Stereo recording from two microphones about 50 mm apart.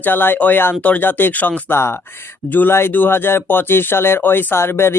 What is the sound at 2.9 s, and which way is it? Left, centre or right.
Speech, left.